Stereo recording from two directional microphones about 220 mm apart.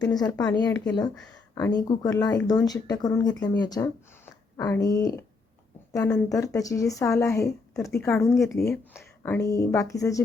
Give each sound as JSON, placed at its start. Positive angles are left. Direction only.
{"t": 0.3, "sound": "speech", "side_deg": 20}